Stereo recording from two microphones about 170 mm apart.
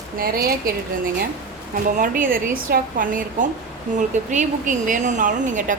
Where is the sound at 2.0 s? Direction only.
55° right (ahead or behind).